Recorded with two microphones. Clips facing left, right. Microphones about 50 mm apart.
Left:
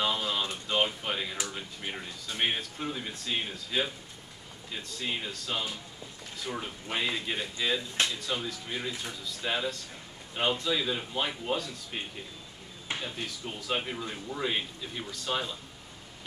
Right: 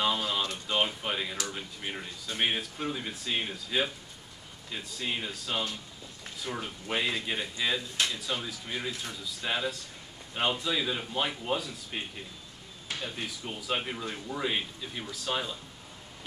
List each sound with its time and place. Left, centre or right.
0.0 s a sound: centre
1.5 s a man's voice: centre
13.0 s a man's voice: centre